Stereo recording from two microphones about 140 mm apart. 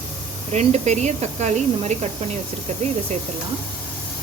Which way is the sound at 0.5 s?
55° right (ahead or behind).